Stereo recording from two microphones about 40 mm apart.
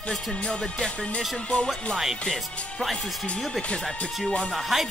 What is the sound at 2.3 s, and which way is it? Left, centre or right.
Speech, centre.